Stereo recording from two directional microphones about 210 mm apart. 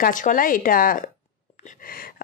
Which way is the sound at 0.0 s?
40° left (ahead or behind).